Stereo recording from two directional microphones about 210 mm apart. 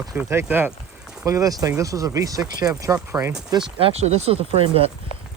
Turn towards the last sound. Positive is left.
turn(degrees=-30)  # may be behind; listen again after turning